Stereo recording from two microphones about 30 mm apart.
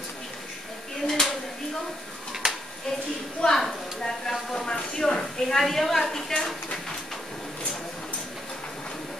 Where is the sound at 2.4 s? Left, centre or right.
Right.